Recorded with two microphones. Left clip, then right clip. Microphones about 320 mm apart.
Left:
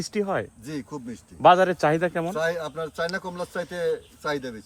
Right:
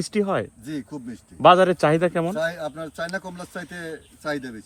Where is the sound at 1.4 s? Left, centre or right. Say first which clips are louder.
Right 2 dB; right.